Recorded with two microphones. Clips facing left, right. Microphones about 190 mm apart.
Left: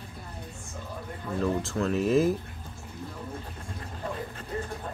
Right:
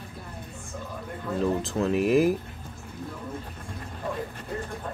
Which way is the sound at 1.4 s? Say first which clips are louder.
Right 2 dB; 20° right (ahead or behind).